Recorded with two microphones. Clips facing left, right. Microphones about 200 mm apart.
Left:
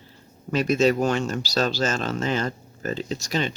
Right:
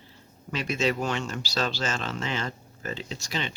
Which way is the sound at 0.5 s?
40° left (ahead or behind).